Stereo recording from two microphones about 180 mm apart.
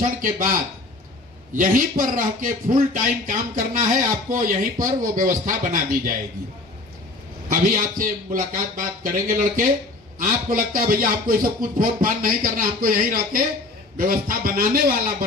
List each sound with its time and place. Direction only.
0.0 s speech: 50° right (ahead or behind)
1.6 s speech: 50° right (ahead or behind)
7.4 s speech: 50° right (ahead or behind)